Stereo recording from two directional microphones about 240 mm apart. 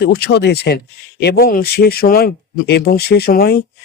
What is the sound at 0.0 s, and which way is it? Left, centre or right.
A man's voice, left.